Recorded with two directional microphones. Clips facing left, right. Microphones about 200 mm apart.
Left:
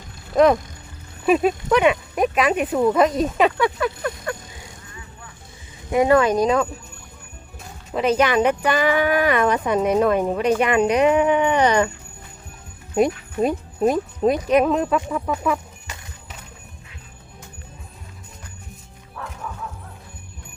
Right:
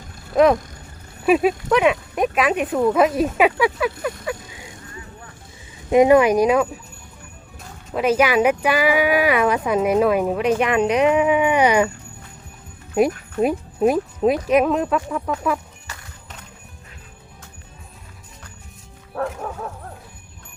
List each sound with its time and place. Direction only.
0.3 s speech: centre (ahead or behind)
5.9 s speech: 15° right (ahead or behind)
7.9 s speech: 5° right (ahead or behind)
13.4 s speech: 5° right (ahead or behind)
15.9 s horse: 20° left (ahead or behind)
19.1 s bow-wow: 55° right (ahead or behind)